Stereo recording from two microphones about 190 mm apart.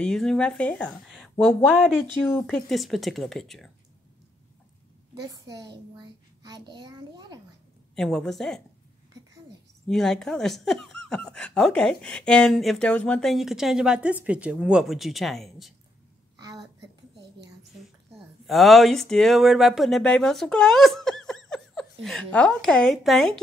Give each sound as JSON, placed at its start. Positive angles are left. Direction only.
{"t": 0.0, "sound": "speech", "side_deg": 5}
{"t": 5.2, "sound": "a child's voice", "side_deg": -20}
{"t": 7.9, "sound": "speech", "side_deg": 5}
{"t": 9.8, "sound": "speech", "side_deg": 0}
{"t": 16.3, "sound": "a sound", "side_deg": -20}
{"t": 18.5, "sound": "speech", "side_deg": 0}